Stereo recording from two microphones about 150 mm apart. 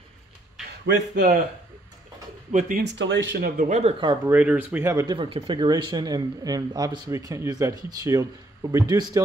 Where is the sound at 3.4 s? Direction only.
70° right (ahead or behind); by 3.9 s 50° right (ahead or behind).